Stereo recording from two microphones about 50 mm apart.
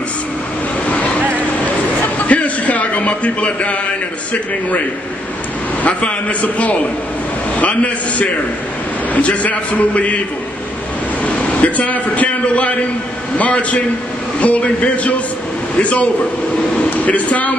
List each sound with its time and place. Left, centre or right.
2.1 s a sound: left
4.3 s a man's voice: left
5.9 s a man's voice: left
11.3 s a man's voice: left